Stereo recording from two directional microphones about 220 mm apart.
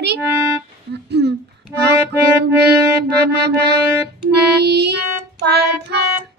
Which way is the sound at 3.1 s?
50° right (ahead or behind).